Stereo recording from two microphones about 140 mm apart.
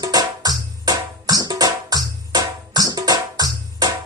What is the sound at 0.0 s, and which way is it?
Music, 30° right (ahead or behind).